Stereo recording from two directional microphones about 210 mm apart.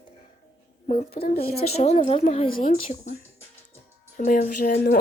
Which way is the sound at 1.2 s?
45° left (ahead or behind).